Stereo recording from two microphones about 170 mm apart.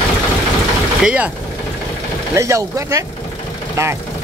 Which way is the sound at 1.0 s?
5° right (ahead or behind).